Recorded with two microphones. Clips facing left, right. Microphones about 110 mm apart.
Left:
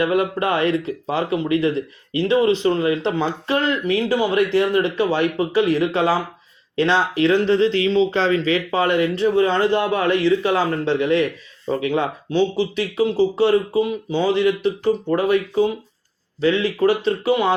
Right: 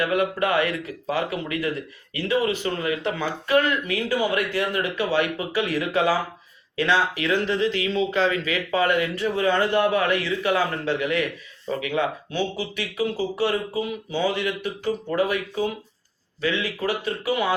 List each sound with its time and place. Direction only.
0.0 s speech: 30° left (ahead or behind)